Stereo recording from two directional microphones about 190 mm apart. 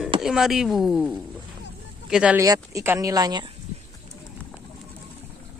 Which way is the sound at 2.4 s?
20° right (ahead or behind).